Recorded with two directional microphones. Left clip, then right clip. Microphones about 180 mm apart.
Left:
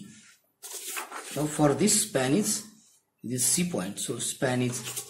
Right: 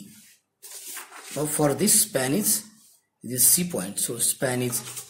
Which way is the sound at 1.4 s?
15° right (ahead or behind).